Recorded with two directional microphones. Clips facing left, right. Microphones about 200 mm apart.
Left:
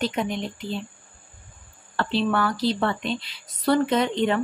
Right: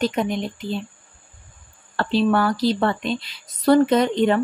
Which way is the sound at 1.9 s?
40° right (ahead or behind).